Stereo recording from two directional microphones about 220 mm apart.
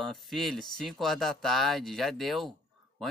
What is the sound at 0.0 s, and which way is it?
Speech, centre (ahead or behind).